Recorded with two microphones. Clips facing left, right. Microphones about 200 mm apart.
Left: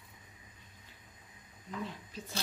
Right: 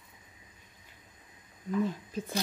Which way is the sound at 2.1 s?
50° right (ahead or behind).